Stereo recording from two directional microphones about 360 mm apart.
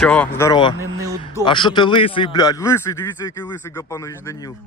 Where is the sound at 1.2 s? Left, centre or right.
Centre.